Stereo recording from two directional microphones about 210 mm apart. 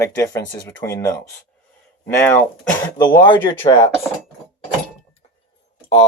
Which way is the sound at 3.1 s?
20° left (ahead or behind).